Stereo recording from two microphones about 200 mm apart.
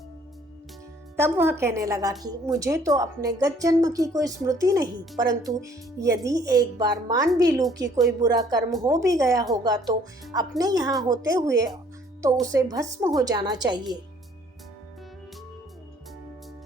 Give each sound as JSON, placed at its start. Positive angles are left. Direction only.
{"t": 1.1, "sound": "a woman's voice", "side_deg": -10}